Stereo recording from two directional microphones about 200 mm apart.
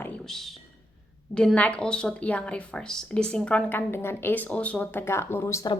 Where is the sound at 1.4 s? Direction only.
5° left (ahead or behind).